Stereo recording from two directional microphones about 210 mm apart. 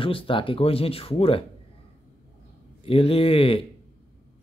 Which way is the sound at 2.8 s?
25° left (ahead or behind).